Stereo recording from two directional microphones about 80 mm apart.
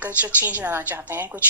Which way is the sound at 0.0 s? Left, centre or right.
Centre.